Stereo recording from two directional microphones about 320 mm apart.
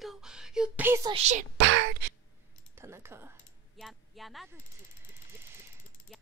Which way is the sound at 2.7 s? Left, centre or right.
Centre.